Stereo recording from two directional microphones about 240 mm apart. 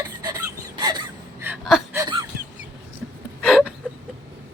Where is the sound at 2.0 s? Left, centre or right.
Centre.